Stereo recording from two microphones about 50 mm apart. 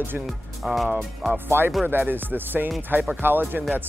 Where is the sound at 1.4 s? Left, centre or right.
Right.